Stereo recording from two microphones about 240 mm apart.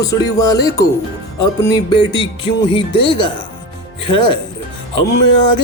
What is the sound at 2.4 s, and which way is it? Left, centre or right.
Speech, left.